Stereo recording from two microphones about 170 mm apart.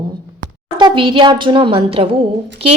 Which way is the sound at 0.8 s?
30° right (ahead or behind).